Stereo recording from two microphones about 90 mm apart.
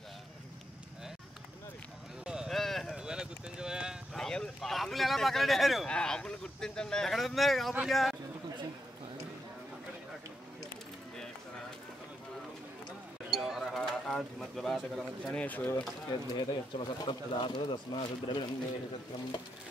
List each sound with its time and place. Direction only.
2.2 s a sound: 5° right (ahead or behind)
3.0 s clip-clop: 10° right (ahead or behind)
4.1 s a sound: 5° left (ahead or behind)
5.9 s speech: 10° left (ahead or behind)
13.3 s bird: centre (ahead or behind)
15.3 s speech: 20° left (ahead or behind)
16.1 s speech: 55° left (ahead or behind)